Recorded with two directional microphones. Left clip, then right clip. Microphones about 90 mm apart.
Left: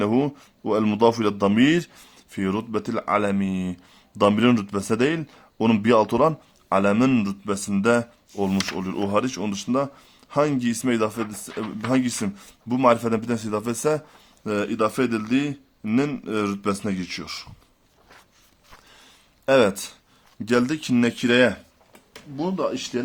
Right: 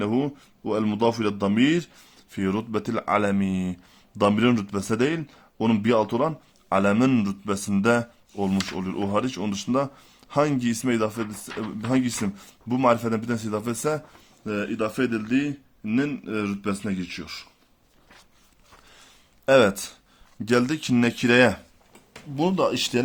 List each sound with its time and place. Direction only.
0.0 s speech: 40° left (ahead or behind)
2.3 s a man's voice: 15° left (ahead or behind)
2.7 s a man's voice: centre (ahead or behind)
4.2 s a man's voice: 15° left (ahead or behind)
6.1 s speech: 40° left (ahead or behind)
6.7 s a man's voice: 10° left (ahead or behind)
8.4 s a man's voice: 15° left (ahead or behind)
9.4 s a man's voice: centre (ahead or behind); by 14.0 s 25° left (ahead or behind)
14.4 s a man's voice: 60° left (ahead or behind)
18.9 s a sound: centre (ahead or behind)
20.4 s a man's voice: centre (ahead or behind)
21.1 s speech: 15° right (ahead or behind)
21.3 s speech: 40° right (ahead or behind)